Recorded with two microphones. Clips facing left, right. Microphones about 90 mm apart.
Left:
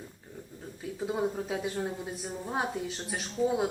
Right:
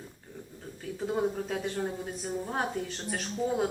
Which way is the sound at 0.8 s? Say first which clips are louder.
Right 1 dB; 5° left (ahead or behind).